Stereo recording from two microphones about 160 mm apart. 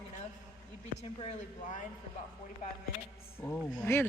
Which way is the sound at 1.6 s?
50° left (ahead or behind).